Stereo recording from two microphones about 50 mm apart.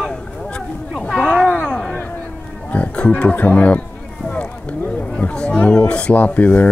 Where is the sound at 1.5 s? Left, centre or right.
Left.